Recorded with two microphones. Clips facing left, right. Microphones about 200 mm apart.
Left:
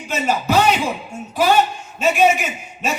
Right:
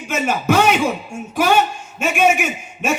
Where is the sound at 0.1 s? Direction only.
50° right (ahead or behind).